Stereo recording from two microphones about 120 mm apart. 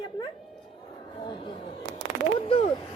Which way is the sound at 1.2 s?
45° left (ahead or behind).